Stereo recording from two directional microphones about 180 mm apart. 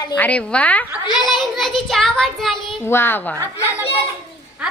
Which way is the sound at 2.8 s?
15° left (ahead or behind).